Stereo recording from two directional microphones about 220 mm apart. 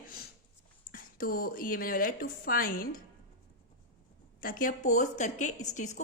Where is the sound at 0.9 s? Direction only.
40° left (ahead or behind).